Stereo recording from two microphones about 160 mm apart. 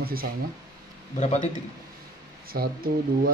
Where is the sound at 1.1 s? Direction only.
45° left (ahead or behind).